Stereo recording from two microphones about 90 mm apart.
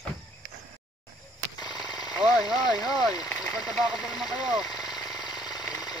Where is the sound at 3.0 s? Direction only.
5° right (ahead or behind).